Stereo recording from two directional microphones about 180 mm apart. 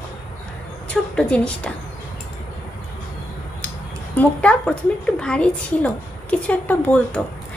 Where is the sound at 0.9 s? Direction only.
5° left (ahead or behind).